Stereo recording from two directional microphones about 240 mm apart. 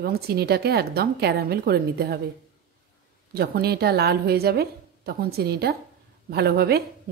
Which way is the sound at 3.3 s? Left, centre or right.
Right.